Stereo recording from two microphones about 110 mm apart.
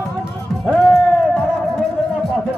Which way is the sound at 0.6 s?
5° left (ahead or behind).